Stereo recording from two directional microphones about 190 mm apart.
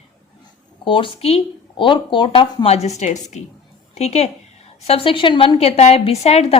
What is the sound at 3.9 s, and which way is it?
A woman's voice, 35° left (ahead or behind).